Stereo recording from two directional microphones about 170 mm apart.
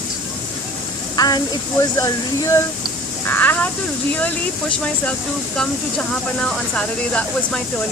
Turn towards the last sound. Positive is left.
turn(degrees=5)  # may be behind; listen again after turning